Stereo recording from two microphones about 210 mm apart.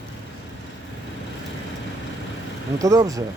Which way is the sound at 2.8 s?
15° right (ahead or behind).